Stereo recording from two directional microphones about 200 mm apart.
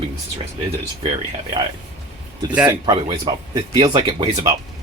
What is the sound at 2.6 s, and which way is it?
Speech, 15° right (ahead or behind).